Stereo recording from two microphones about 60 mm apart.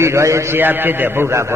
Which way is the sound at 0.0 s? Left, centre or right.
Right.